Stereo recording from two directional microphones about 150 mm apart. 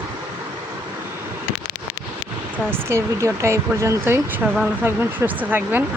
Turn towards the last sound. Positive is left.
turn(degrees=-10)  # may be behind; listen again after turning